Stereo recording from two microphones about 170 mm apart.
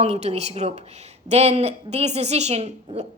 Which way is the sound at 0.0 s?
40° right (ahead or behind).